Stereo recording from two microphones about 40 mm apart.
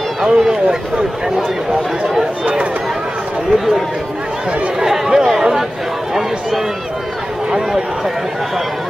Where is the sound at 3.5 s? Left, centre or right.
Centre.